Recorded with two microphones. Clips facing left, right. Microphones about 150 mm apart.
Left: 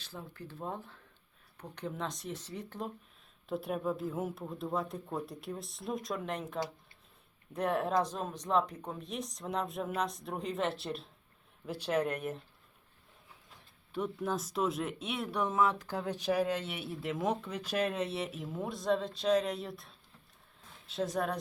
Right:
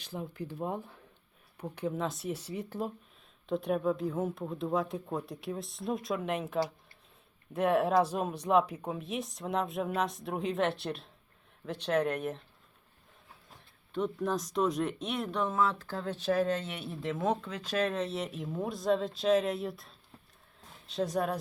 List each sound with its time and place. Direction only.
0.0 s speech: 15° right (ahead or behind)
3.4 s speech: 5° left (ahead or behind)
13.9 s speech: 10° left (ahead or behind)